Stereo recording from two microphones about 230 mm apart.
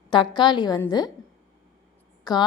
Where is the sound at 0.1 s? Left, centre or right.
Centre.